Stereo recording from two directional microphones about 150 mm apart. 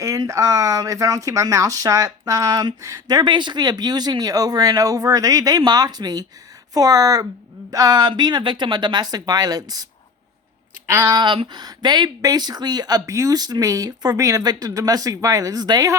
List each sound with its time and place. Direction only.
0.0 s speech: 20° right (ahead or behind)
11.0 s speech: 30° right (ahead or behind)